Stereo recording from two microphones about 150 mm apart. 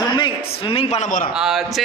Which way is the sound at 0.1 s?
35° left (ahead or behind).